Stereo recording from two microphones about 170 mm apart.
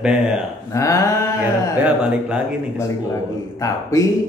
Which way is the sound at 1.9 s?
5° right (ahead or behind).